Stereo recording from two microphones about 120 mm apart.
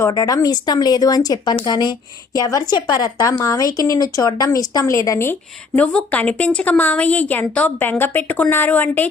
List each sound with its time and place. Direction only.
0.1 s a woman's voice: 30° left (ahead or behind)
5.7 s a woman's voice: 10° left (ahead or behind)